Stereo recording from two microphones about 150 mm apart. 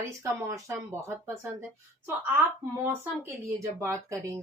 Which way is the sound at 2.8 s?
15° right (ahead or behind).